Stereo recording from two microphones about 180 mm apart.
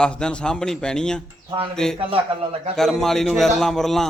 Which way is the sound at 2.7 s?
Centre (ahead or behind).